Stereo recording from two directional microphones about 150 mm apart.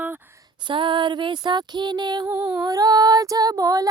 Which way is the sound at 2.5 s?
25° right (ahead or behind).